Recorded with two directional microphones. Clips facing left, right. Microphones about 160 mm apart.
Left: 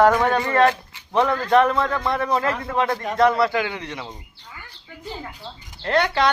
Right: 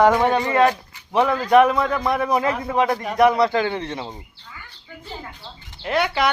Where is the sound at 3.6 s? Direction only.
30° right (ahead or behind).